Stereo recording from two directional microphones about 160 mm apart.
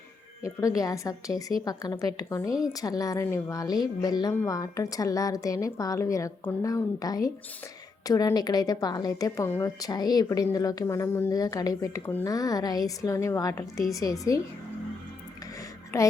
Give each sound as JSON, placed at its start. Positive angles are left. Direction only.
{"t": 0.8, "sound": "a woman's voice", "side_deg": 20}
{"t": 15.9, "sound": "speech", "side_deg": 15}